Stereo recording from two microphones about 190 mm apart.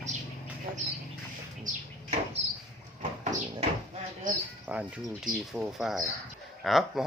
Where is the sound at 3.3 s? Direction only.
40° right (ahead or behind).